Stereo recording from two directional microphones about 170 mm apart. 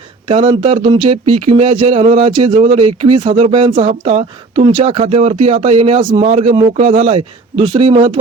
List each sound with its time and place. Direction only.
0.3 s speech: 30° right (ahead or behind)